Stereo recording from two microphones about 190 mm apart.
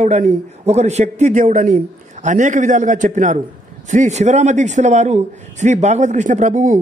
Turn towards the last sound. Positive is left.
turn(degrees=-40)  # may be behind; listen again after turning